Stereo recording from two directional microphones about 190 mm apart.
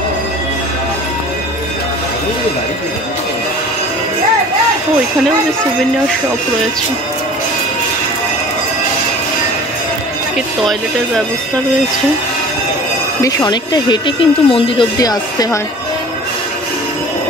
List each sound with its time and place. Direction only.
10.3 s speech: centre (ahead or behind)
13.2 s speech: 20° left (ahead or behind)